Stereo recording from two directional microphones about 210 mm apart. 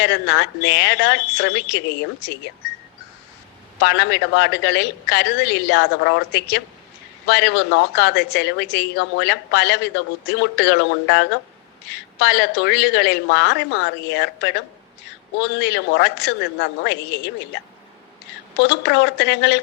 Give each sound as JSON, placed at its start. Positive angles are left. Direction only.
{"t": 0.0, "sound": "speech", "side_deg": 55}
{"t": 3.8, "sound": "a woman's voice", "side_deg": 55}
{"t": 12.2, "sound": "a woman's voice", "side_deg": 55}
{"t": 18.6, "sound": "a woman's voice", "side_deg": 55}